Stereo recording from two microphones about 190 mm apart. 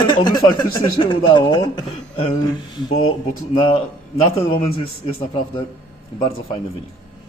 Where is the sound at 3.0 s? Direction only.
90° left.